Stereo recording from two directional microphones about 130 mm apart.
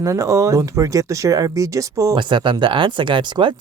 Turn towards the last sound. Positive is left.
turn(degrees=-40)  # may be behind; listen again after turning